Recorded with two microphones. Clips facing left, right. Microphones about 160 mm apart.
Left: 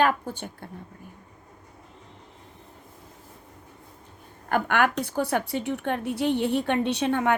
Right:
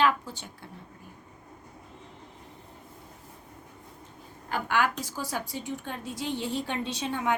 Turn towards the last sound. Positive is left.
turn(degrees=60)  # may be behind; listen again after turning